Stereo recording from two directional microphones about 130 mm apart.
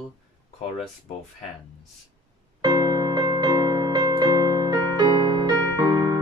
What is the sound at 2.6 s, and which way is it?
Music, 30° right (ahead or behind).